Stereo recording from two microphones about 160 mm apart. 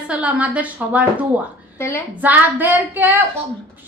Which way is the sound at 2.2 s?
10° right (ahead or behind).